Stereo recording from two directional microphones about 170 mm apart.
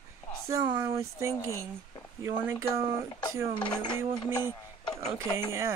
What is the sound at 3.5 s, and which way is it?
Speech, 25° left (ahead or behind).